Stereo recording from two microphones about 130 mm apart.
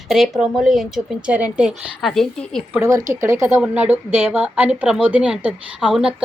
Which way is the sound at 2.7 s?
20° right (ahead or behind).